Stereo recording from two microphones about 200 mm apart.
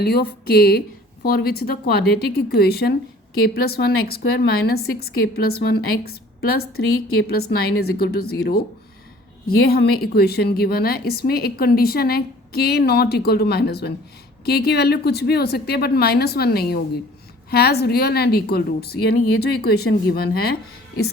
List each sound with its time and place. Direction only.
0.0 s a woman's voice: 55° left (ahead or behind)
9.6 s a woman's voice: 50° left (ahead or behind)